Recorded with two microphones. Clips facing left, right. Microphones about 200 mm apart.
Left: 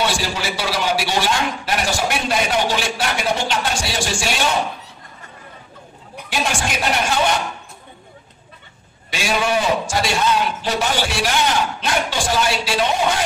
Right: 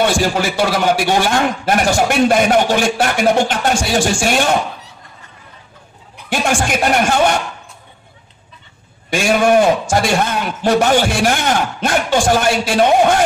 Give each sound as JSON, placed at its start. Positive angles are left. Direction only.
{"t": 0.0, "sound": "a man's voice", "side_deg": -50}
{"t": 6.3, "sound": "a man's voice", "side_deg": -50}
{"t": 9.1, "sound": "a man's voice", "side_deg": -50}